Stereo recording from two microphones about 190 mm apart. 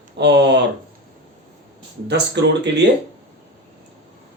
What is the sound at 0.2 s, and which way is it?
Speech, 65° right (ahead or behind).